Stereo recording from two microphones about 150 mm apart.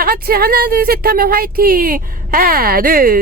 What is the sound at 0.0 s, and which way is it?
Speech, 80° right.